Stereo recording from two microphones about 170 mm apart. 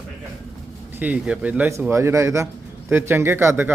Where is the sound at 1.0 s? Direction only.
10° right (ahead or behind).